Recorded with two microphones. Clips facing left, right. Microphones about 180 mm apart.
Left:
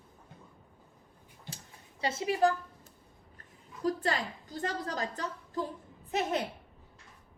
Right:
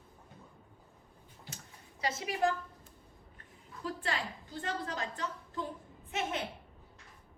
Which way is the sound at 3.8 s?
40° left (ahead or behind).